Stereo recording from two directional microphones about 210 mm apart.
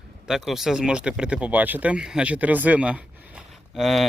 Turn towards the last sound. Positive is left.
turn(degrees=0)  # may be behind; listen again after turning